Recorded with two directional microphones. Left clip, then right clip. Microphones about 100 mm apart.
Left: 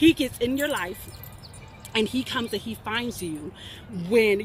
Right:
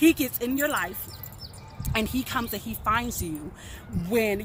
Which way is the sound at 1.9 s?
45° right (ahead or behind).